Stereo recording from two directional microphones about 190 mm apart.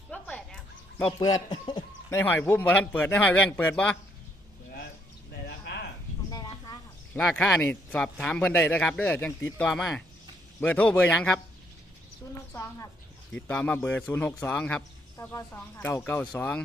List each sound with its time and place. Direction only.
0.1 s a sound: 5° left (ahead or behind)
1.2 s a man's voice: 25° left (ahead or behind)
2.0 s speech: 10° left (ahead or behind)
7.1 s speech: 5° left (ahead or behind)
12.5 s speech: 15° left (ahead or behind)